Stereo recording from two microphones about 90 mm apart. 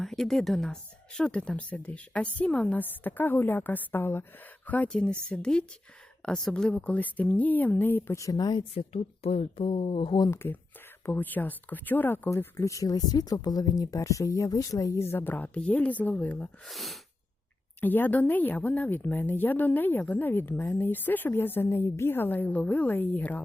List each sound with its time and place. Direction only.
0.0 s speech: 5° left (ahead or behind); by 8.1 s 20° left (ahead or behind)
8.1 s speech: 40° left (ahead or behind)
9.2 s speech: 90° left
10.2 s speech: 25° left (ahead or behind)
16.6 s speech: centre (ahead or behind)
17.7 s speech: 20° left (ahead or behind)